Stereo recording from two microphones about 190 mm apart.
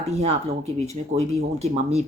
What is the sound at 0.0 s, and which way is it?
Speech, 35° right (ahead or behind).